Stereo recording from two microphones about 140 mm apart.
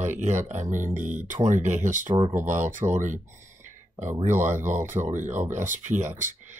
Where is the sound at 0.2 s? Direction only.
60° right (ahead or behind).